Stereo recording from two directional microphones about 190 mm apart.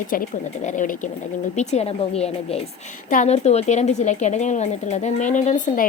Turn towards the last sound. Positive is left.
turn(degrees=40)  # may be behind; listen again after turning